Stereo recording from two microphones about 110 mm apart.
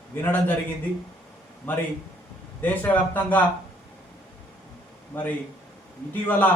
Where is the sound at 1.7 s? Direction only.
15° left (ahead or behind).